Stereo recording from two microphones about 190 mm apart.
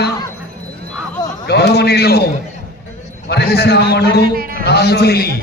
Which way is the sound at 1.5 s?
60° left (ahead or behind).